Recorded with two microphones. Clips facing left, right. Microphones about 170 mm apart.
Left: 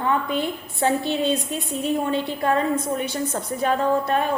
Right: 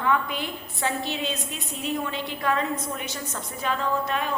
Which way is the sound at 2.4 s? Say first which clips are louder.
Left 4 dB; 35° left (ahead or behind).